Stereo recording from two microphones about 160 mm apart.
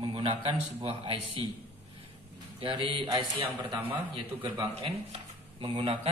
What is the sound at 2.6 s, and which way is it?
Speech, 30° right (ahead or behind).